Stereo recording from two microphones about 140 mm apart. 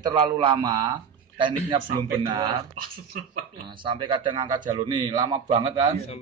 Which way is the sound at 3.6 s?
35° right (ahead or behind).